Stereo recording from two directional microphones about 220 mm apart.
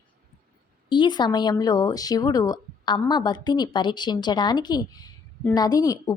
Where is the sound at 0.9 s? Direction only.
20° left (ahead or behind).